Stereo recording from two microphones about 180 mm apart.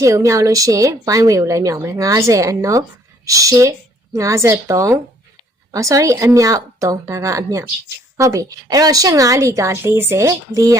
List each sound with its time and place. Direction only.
0.0 s a woman's voice: 15° right (ahead or behind)